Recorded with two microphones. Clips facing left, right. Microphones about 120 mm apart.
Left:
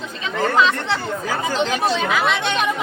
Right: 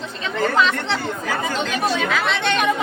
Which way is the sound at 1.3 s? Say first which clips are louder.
Left 3 dB; 30° left (ahead or behind).